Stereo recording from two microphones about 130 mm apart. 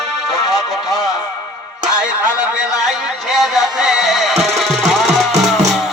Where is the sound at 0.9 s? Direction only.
30° left (ahead or behind).